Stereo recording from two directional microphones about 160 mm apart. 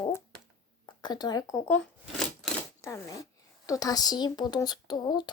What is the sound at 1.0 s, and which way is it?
Speech, 25° left (ahead or behind).